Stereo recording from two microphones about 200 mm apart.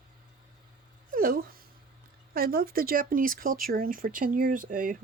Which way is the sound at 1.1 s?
45° right (ahead or behind).